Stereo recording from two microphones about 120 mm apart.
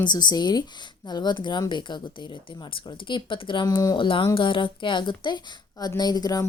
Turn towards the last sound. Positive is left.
turn(degrees=30)  # may be behind; listen again after turning